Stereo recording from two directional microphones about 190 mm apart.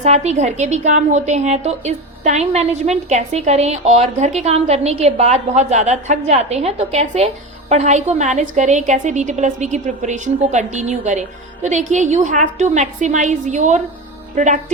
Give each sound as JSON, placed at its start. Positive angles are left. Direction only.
{"t": 0.0, "sound": "a woman's voice", "side_deg": -35}